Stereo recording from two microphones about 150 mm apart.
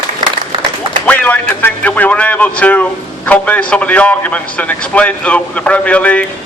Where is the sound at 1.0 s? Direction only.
10° left (ahead or behind).